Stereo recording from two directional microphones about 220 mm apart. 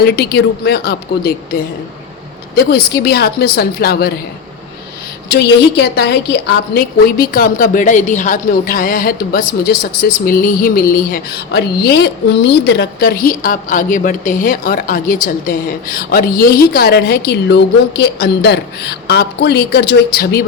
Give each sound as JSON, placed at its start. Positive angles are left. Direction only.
{"t": 0.0, "sound": "a woman's voice", "side_deg": 45}
{"t": 2.6, "sound": "a woman's voice", "side_deg": 45}
{"t": 5.3, "sound": "a woman's voice", "side_deg": 50}